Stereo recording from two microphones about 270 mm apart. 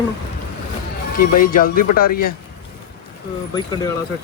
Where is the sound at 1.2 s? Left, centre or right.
Left.